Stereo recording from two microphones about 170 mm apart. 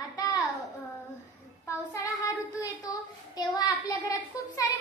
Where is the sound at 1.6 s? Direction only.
20° left (ahead or behind).